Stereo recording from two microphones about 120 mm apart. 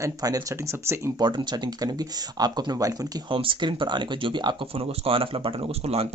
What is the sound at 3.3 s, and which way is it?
Speech, 45° right (ahead or behind).